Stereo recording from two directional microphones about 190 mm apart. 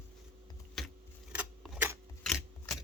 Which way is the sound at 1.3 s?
10° right (ahead or behind).